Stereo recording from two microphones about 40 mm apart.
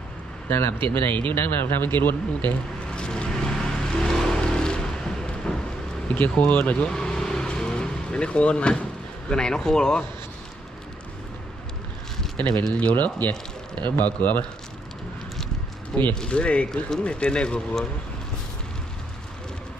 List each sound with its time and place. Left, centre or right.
0.5 s speech: left
1.1 s speech: left
3.0 s vehicle: left
6.1 s speech: left
6.9 s vehicle: centre
9.3 s speech: centre
12.9 s speech: left
15.9 s speech: centre
16.3 s speech: left